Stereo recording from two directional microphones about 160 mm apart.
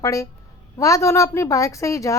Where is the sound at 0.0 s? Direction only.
20° left (ahead or behind).